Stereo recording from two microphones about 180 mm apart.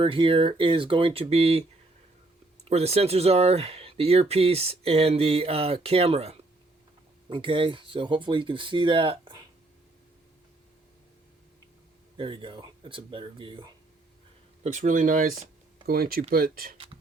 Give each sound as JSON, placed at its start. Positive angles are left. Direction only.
{"t": 0.0, "sound": "speech", "side_deg": -30}
{"t": 2.6, "sound": "speech", "side_deg": -35}
{"t": 12.1, "sound": "speech", "side_deg": -30}
{"t": 14.6, "sound": "speech", "side_deg": -40}